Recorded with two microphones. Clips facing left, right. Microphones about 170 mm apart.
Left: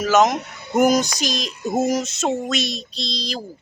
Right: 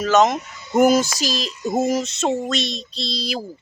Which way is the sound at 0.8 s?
Centre (ahead or behind).